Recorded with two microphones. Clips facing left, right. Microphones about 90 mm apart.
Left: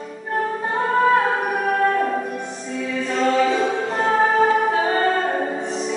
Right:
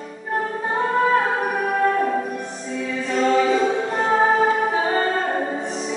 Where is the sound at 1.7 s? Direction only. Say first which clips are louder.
Left 1 dB; centre (ahead or behind).